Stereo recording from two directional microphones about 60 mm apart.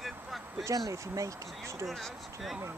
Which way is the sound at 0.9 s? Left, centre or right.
Right.